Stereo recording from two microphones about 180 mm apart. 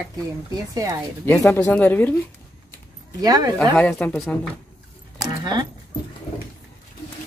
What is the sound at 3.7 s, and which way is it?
Speech, 10° left (ahead or behind).